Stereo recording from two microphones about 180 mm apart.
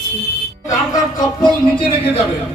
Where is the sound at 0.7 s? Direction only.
20° left (ahead or behind).